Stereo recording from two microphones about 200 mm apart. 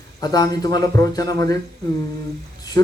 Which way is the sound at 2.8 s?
15° left (ahead or behind).